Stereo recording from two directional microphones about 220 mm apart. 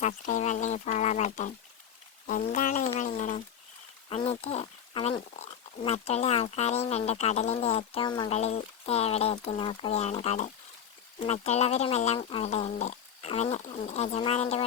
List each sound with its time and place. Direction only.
0.0 s speech: 35° left (ahead or behind)